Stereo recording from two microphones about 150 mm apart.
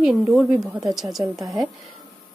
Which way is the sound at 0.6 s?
25° right (ahead or behind).